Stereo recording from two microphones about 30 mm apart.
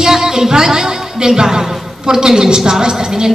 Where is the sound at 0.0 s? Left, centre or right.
Centre.